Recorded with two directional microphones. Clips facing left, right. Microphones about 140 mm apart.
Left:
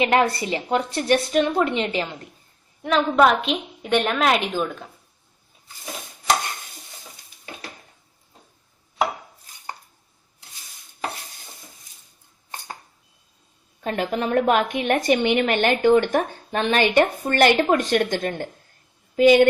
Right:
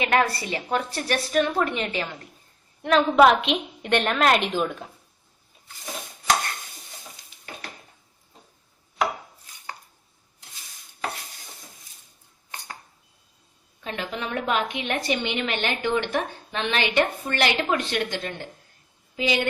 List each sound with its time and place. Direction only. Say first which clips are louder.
0.0 s a woman's voice: left 3 dB; 25° left (ahead or behind)
2.8 s a woman's voice: right 1 dB; centre (ahead or behind)
13.8 s a woman's voice: left 7 dB; 45° left (ahead or behind)